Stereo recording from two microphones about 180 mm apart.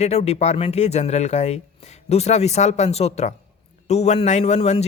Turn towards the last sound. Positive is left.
turn(degrees=40)  # may be behind; listen again after turning